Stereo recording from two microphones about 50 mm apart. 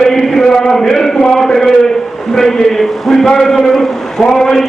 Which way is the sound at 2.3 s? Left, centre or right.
Centre.